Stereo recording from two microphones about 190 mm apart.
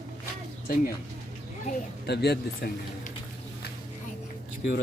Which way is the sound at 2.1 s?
60° left (ahead or behind).